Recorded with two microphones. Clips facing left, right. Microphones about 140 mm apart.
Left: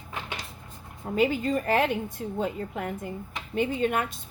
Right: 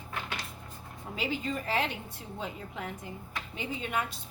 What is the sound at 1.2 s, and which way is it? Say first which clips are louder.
A woman's voice: left 9 dB; 50° left (ahead or behind).